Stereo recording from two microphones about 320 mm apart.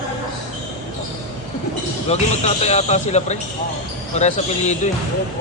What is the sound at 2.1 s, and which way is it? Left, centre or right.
Speech, centre.